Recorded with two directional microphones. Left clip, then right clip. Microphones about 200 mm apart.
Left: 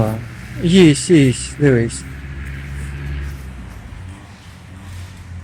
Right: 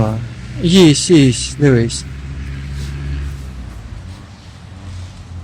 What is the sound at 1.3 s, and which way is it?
Speech, centre (ahead or behind).